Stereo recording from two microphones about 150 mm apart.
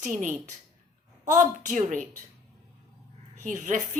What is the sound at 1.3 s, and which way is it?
Speech, 55° right (ahead or behind).